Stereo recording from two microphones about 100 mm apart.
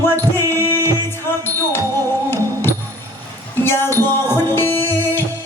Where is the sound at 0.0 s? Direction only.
25° left (ahead or behind).